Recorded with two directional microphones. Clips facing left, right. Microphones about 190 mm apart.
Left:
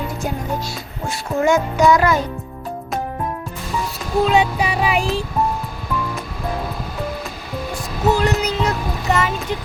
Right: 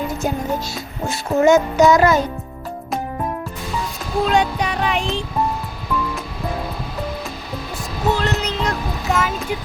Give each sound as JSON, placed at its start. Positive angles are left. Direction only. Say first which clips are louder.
{"t": 1.0, "sound": "music", "louder": "right 3 dB", "side_deg": -20}
{"t": 4.2, "sound": "music", "louder": "left 2 dB", "side_deg": 5}
{"t": 8.1, "sound": "music", "louder": "left 4 dB", "side_deg": 10}